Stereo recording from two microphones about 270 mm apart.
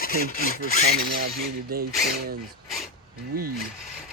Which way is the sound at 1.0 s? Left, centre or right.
Right.